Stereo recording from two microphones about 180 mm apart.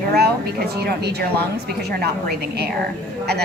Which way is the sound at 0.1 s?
60° right (ahead or behind).